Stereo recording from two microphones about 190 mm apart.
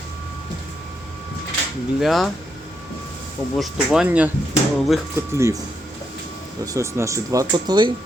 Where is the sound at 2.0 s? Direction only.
Centre (ahead or behind).